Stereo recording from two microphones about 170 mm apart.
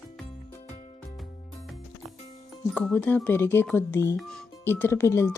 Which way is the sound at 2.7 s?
5° left (ahead or behind).